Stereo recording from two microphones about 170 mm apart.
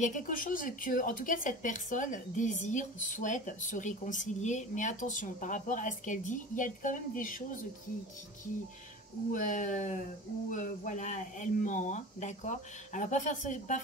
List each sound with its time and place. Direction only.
0.0 s a woman's voice: 50° left (ahead or behind)
9.3 s a woman's voice: 50° left (ahead or behind)